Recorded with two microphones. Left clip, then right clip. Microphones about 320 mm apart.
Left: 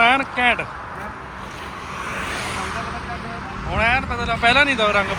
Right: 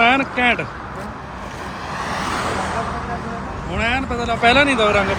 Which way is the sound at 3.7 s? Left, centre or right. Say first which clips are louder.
Left 2 dB; centre.